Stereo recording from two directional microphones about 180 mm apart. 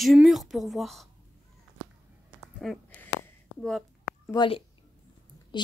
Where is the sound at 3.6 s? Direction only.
Centre (ahead or behind).